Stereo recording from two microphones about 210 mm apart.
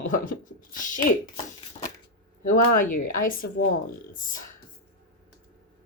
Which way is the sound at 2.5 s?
40° left (ahead or behind).